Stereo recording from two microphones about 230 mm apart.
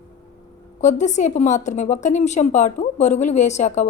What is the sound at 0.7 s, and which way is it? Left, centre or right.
Speech, left.